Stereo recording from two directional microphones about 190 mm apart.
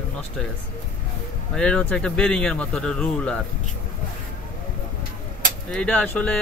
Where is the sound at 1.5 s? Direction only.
5° left (ahead or behind).